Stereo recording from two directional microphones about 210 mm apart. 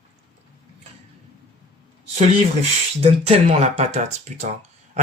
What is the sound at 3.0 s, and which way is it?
Speech, 30° right (ahead or behind).